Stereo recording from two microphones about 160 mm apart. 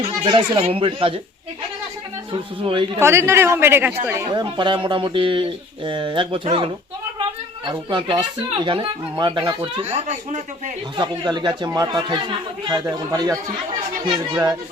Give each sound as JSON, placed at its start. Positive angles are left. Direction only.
{"t": 0.0, "sound": "speech", "side_deg": -30}
{"t": 2.3, "sound": "speech", "side_deg": -30}
{"t": 3.0, "sound": "a man's voice", "side_deg": -15}
{"t": 4.3, "sound": "speech", "side_deg": -30}
{"t": 9.8, "sound": "speech", "side_deg": -45}
{"t": 10.9, "sound": "speech", "side_deg": -25}